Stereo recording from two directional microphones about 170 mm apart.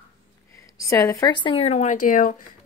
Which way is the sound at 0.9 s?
15° left (ahead or behind).